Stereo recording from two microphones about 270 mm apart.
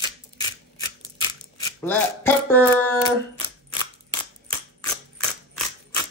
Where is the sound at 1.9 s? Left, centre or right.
Centre.